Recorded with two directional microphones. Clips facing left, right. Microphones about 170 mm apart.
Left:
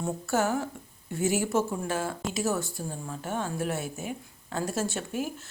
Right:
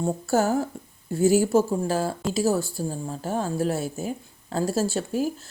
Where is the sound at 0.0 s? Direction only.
35° right (ahead or behind).